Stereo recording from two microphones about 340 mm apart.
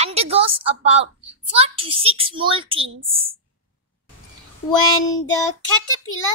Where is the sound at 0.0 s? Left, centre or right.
Centre.